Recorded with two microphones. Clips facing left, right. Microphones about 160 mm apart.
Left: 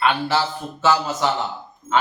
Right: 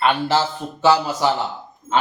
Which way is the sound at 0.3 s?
20° right (ahead or behind).